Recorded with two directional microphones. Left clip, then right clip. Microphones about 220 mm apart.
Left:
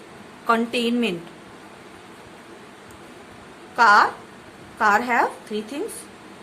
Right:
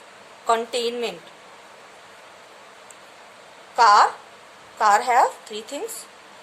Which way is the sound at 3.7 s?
30° right (ahead or behind).